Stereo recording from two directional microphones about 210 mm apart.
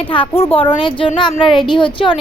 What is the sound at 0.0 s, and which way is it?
Speech, 25° left (ahead or behind).